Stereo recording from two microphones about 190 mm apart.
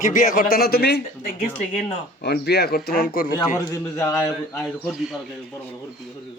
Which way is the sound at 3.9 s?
15° left (ahead or behind).